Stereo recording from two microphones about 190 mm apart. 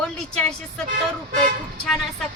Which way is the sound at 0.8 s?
45° right (ahead or behind).